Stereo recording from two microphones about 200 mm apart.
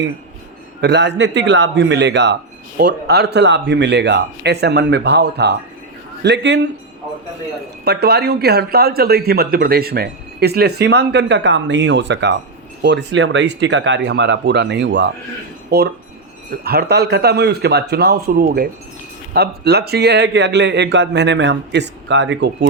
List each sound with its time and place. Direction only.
0.8 s speech: 60° right (ahead or behind)
7.9 s speech: 55° right (ahead or behind)